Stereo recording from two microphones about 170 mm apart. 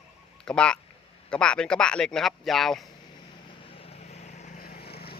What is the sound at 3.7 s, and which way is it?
Vehicle, 35° left (ahead or behind).